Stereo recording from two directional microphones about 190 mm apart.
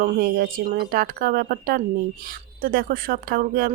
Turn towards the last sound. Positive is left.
turn(degrees=-50)  # may be behind; listen again after turning